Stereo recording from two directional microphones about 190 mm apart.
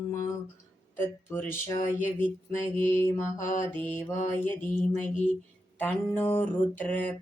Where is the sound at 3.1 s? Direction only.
40° left (ahead or behind).